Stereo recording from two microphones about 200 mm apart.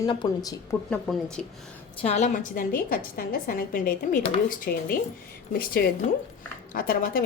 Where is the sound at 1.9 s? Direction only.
35° left (ahead or behind).